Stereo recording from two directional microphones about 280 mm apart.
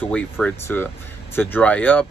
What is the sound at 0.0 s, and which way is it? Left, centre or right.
Speech, centre.